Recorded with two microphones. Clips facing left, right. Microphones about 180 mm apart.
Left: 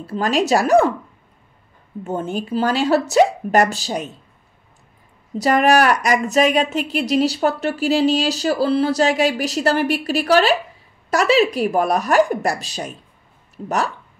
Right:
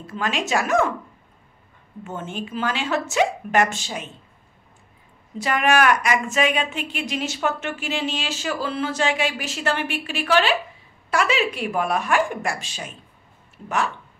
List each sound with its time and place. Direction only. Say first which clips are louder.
0.0 s a woman's voice: left 7 dB; 35° left (ahead or behind)
2.0 s a woman's voice: left 7 dB; 40° left (ahead or behind)
5.4 s a woman's voice: left 5 dB; 40° left (ahead or behind)